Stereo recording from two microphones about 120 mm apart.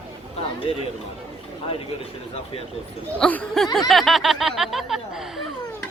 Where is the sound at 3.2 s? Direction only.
10° left (ahead or behind).